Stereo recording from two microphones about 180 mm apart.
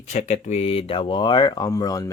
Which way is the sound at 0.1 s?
40° left (ahead or behind).